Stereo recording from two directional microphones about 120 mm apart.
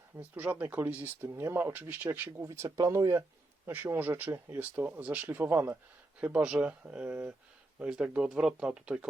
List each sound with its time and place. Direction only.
0.2 s speech: 15° right (ahead or behind)
2.5 s speech: 25° right (ahead or behind)
3.7 s speech: 15° right (ahead or behind)